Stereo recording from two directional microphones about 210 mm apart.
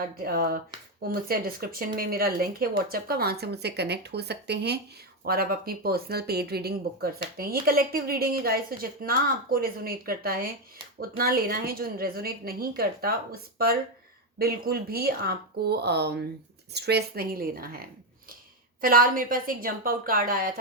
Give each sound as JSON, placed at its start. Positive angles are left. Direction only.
{"t": 0.2, "sound": "speech", "side_deg": -45}